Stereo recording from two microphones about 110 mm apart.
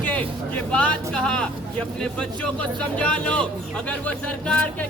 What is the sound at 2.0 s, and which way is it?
Speech, 10° left (ahead or behind).